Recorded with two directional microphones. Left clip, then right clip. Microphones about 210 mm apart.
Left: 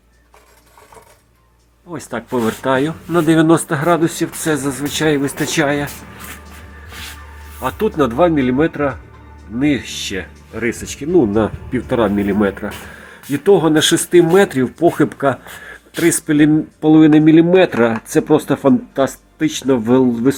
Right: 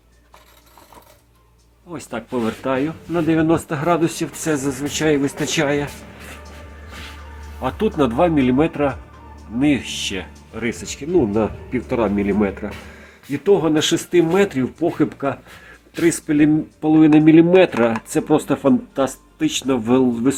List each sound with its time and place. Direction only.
1.9 s speech: 15° left (ahead or behind)
7.6 s speech: 10° left (ahead or behind)